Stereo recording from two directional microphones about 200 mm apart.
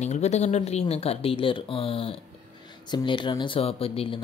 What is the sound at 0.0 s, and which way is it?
Speech, 35° left (ahead or behind).